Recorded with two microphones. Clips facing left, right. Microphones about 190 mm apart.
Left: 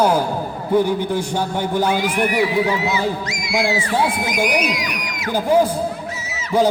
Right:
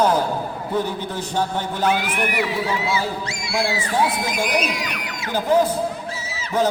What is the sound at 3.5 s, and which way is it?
A man's voice, 15° left (ahead or behind).